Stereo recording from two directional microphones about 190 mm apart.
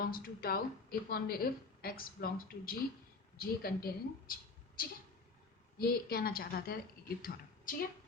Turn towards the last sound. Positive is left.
turn(degrees=50)  # may be behind; listen again after turning